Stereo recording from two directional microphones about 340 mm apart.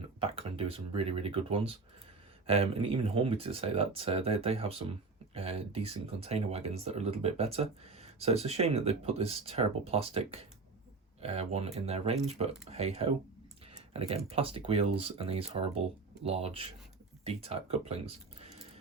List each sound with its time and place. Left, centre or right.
0.2 s speech: centre